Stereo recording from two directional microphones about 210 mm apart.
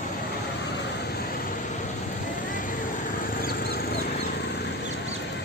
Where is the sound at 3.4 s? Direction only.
45° left (ahead or behind).